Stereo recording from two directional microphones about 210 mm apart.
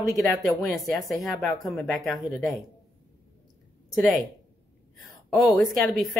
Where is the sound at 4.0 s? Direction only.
Centre (ahead or behind).